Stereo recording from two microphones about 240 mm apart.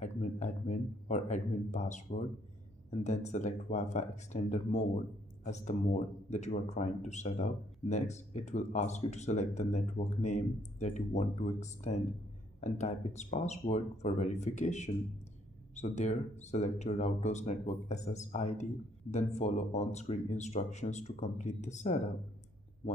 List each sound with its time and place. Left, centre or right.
0.0 s speech: left